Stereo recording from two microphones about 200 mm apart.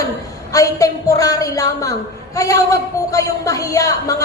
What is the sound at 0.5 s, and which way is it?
A man's voice, 15° left (ahead or behind).